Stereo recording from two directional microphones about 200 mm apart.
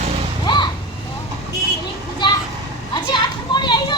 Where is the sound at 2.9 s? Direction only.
20° left (ahead or behind).